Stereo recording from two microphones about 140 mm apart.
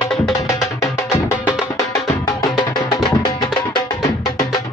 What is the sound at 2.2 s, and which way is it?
Music, 30° left (ahead or behind).